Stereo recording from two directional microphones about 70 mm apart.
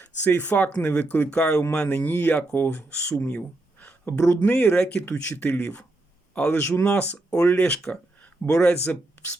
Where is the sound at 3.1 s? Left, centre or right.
Centre.